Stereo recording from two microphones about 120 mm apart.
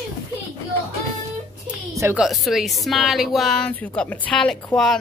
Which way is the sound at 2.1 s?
Centre (ahead or behind).